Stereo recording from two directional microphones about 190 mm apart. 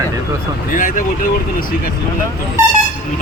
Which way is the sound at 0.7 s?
45° left (ahead or behind).